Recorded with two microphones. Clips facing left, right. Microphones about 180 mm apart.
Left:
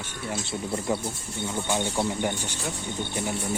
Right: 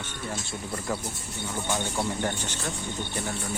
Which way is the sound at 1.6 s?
10° left (ahead or behind).